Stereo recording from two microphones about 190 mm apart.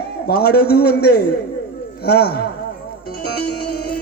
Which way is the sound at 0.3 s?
55° left (ahead or behind).